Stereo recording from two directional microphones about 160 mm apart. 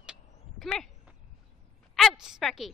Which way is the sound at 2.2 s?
Centre (ahead or behind).